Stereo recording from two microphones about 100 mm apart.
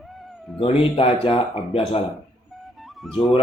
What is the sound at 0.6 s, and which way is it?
Speech, 60° left (ahead or behind).